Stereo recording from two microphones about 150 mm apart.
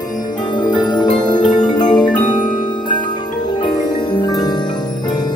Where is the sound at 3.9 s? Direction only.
30° left (ahead or behind).